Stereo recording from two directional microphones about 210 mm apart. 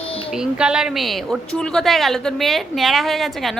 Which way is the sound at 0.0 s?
25° left (ahead or behind).